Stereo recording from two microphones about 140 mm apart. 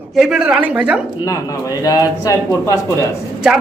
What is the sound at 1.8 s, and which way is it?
Speech, 25° left (ahead or behind).